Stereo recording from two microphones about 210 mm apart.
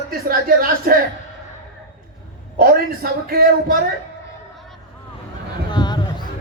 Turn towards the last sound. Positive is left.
turn(degrees=20)  # may be behind; listen again after turning